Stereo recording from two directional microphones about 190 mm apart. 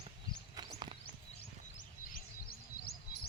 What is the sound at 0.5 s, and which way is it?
Walk, 25° right (ahead or behind).